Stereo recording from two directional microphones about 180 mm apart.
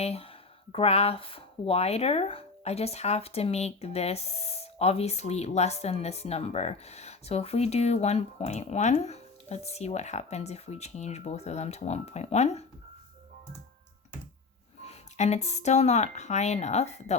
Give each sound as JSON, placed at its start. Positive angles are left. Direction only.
{"t": 0.0, "sound": "speech", "side_deg": 35}
{"t": 14.8, "sound": "speech", "side_deg": 40}